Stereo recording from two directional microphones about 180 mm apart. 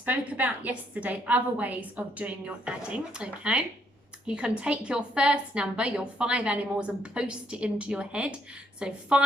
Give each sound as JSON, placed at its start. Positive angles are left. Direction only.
{"t": 0.0, "sound": "a woman's voice", "side_deg": -10}